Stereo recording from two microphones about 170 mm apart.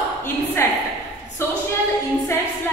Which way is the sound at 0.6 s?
15° left (ahead or behind).